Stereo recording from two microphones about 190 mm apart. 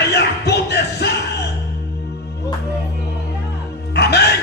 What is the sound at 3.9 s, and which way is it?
Music, 60° left (ahead or behind).